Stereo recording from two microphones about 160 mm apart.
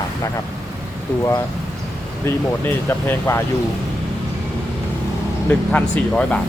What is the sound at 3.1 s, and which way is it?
Speech, 15° left (ahead or behind).